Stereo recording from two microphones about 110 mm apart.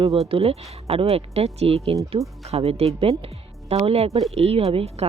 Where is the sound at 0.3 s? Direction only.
60° right (ahead or behind).